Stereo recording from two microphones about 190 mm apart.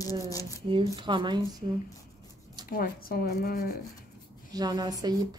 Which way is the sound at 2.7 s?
50° left (ahead or behind).